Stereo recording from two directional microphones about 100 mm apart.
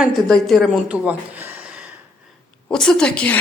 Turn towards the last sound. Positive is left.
turn(degrees=10)  # may be behind; listen again after turning